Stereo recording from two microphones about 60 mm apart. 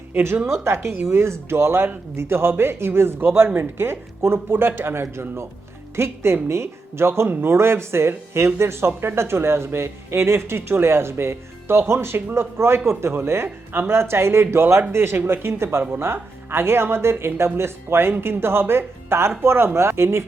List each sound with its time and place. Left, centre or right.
0.1 s speech: right